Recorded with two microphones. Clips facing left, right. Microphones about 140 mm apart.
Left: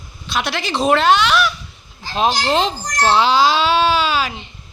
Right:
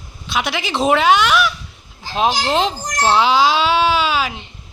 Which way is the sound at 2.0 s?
15° right (ahead or behind).